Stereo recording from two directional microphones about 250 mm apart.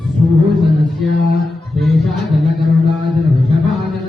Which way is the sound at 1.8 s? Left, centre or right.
Centre.